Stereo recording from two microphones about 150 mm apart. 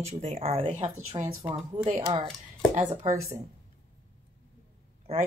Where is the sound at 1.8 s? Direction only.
50° right (ahead or behind).